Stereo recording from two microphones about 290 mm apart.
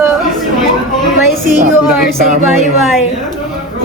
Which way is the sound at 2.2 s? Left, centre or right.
Right.